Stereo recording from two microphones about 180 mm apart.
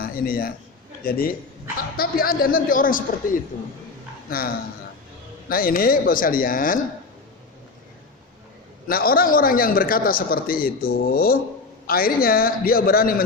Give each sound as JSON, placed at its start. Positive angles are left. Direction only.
{"t": 0.0, "sound": "a man's voice", "side_deg": 55}
{"t": 4.3, "sound": "a man's voice", "side_deg": 55}
{"t": 8.9, "sound": "a man's voice", "side_deg": 55}